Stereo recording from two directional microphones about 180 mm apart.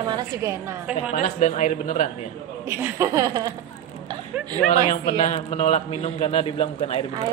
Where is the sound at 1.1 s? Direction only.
45° left (ahead or behind).